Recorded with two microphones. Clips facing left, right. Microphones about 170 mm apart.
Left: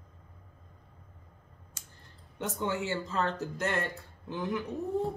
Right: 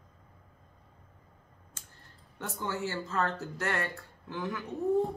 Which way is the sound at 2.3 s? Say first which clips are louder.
Left 3 dB; 20° left (ahead or behind).